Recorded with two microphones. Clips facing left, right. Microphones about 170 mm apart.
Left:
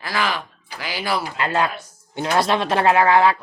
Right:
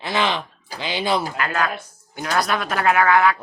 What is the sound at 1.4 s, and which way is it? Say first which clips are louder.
Speech: left 2 dB; 25° left (ahead or behind).